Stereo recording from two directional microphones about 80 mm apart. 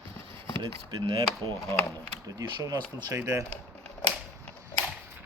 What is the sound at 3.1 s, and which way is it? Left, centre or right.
Speech, right.